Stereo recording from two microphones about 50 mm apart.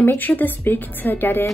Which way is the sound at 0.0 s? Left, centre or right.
Left.